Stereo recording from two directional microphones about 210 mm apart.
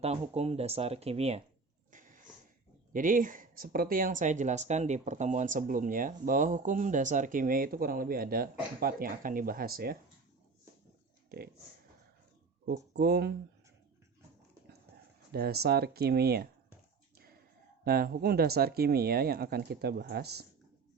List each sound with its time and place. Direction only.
0.0 s speech: 30° right (ahead or behind)
1.9 s sniff: 40° right (ahead or behind)
2.9 s speech: 40° right (ahead or behind)
11.3 s speech: 45° right (ahead or behind)
12.9 s speech: 50° right (ahead or behind)
15.3 s speech: 45° right (ahead or behind)
17.8 s speech: 45° right (ahead or behind)